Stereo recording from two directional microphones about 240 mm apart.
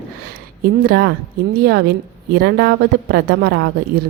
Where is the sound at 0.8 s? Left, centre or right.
Right.